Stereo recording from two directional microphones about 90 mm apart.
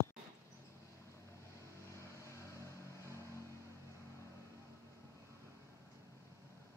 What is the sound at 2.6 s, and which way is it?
Vehicle, 35° right (ahead or behind).